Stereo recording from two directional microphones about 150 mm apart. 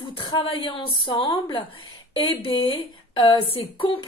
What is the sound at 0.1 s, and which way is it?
Speech, 35° left (ahead or behind).